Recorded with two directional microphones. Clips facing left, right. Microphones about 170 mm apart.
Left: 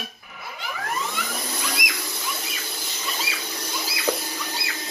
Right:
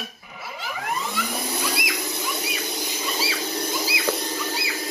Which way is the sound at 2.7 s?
15° right (ahead or behind).